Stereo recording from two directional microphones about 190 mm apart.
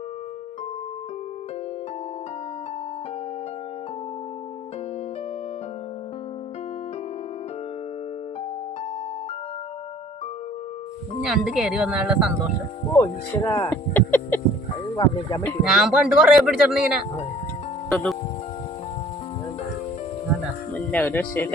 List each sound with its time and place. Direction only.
11.3 s speech: 5° right (ahead or behind)
12.9 s speech: 20° left (ahead or behind)
14.9 s speech: 20° left (ahead or behind)
15.6 s speech: 5° right (ahead or behind)
20.7 s speech: 10° left (ahead or behind)